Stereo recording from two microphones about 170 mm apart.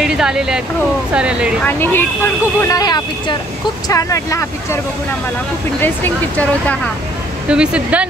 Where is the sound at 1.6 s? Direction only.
10° left (ahead or behind).